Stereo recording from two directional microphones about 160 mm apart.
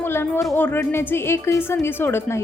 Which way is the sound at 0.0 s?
15° left (ahead or behind).